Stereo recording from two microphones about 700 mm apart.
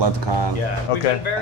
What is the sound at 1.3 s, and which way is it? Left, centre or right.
Speech, left.